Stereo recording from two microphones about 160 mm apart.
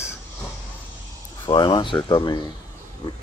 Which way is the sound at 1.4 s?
30° left (ahead or behind).